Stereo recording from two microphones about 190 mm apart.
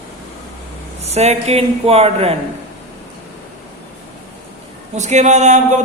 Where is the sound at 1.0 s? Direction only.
35° right (ahead or behind).